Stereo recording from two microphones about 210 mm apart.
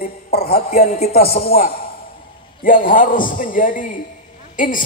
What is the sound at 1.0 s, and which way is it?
A man's voice, 45° left (ahead or behind).